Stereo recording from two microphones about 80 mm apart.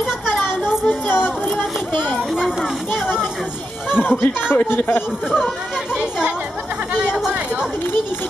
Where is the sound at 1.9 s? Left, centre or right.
Centre.